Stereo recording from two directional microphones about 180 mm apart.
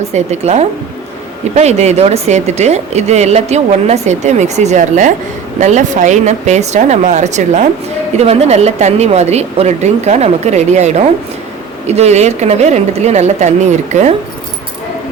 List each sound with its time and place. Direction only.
0.1 s a woman's voice: 40° right (ahead or behind)